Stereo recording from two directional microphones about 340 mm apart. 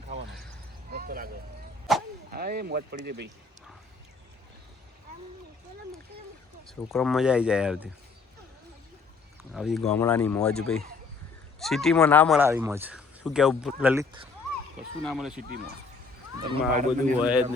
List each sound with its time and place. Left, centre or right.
0.9 s vehicle: right
1.9 s arrow: centre
2.3 s speech: right
6.7 s speech: centre
9.5 s speech: centre
11.6 s speech: centre
12.4 s speech: centre
15.0 s speech: centre
16.5 s speech: right
17.2 s speech: centre